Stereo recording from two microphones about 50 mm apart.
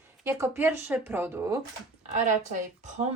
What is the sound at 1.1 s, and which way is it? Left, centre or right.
Speech, right.